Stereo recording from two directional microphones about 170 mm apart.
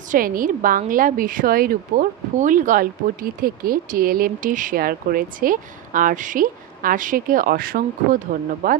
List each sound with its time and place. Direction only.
0.1 s a woman's voice: 55° right (ahead or behind)